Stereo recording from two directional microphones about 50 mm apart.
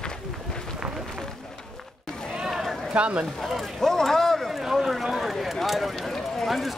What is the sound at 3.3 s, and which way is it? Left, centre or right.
Speech, centre.